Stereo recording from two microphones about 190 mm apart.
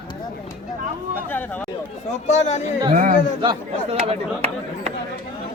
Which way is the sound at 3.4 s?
30° right (ahead or behind).